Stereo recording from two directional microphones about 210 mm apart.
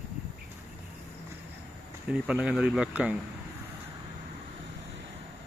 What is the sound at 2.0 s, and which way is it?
Speech, 5° right (ahead or behind).